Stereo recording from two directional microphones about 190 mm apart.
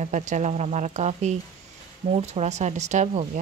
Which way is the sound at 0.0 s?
40° right (ahead or behind).